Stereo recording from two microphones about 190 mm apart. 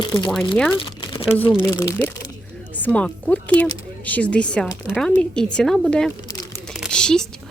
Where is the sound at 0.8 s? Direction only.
25° left (ahead or behind).